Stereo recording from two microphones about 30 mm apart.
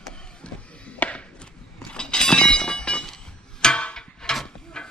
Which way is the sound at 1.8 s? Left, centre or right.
Left.